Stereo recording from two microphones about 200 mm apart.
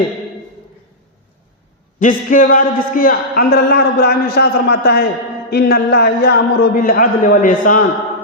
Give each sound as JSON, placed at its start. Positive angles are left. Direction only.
{"t": 2.0, "sound": "a man's voice", "side_deg": 40}